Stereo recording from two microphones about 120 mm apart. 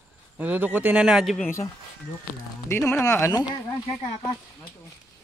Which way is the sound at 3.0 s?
25° left (ahead or behind).